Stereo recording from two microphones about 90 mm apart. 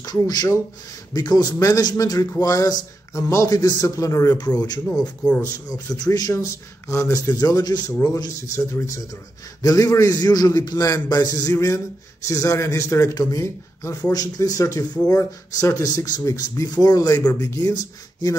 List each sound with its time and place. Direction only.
0.0 s speech: 45° left (ahead or behind)
4.4 s speech: 50° left (ahead or behind)
11.6 s speech: 35° left (ahead or behind)